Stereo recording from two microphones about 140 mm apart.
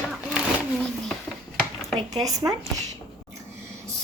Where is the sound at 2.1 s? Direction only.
25° right (ahead or behind).